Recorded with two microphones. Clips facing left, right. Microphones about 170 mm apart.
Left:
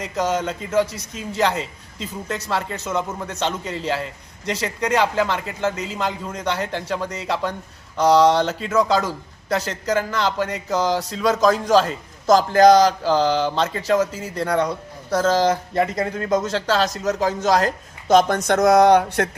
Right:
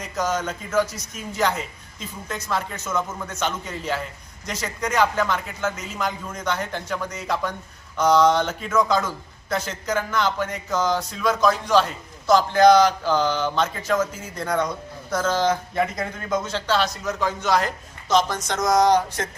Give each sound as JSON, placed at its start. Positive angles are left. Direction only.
{"t": 0.0, "sound": "a man's voice", "side_deg": 30}
{"t": 18.1, "sound": "speech", "side_deg": 55}